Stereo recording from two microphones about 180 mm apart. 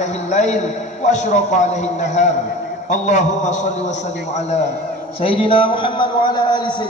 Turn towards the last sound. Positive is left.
turn(degrees=25)  # may be behind; listen again after turning